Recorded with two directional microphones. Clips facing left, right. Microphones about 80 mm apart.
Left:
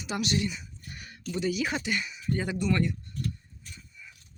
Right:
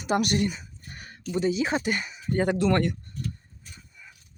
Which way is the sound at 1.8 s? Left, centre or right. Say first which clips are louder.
Right 3 dB; right.